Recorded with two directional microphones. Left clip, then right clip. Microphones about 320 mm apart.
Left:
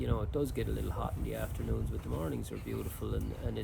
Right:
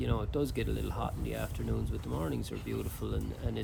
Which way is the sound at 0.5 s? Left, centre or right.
Centre.